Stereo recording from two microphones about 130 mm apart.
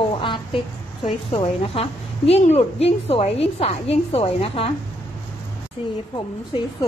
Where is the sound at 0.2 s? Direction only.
40° left (ahead or behind).